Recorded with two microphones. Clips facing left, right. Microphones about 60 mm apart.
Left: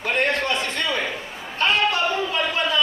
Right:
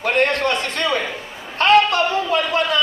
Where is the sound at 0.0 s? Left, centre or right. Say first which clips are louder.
Right 4 dB; right.